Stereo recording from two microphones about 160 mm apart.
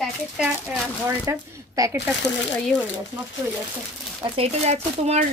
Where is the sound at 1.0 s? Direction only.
20° right (ahead or behind).